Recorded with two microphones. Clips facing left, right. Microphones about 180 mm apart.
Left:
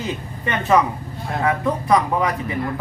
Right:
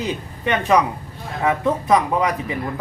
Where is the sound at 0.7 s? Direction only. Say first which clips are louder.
Even; 15° right (ahead or behind).